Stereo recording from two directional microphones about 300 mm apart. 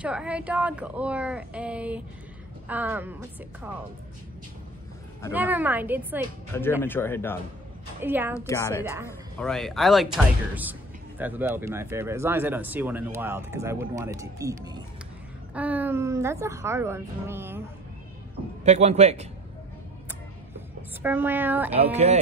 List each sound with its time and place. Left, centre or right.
0.0 s a woman's voice: centre
5.3 s a woman's voice: centre
6.8 s speech: centre
8.0 s speech: centre
8.4 s speech: centre
18.6 s a man's voice: right
21.0 s speech: centre
21.9 s a man's voice: right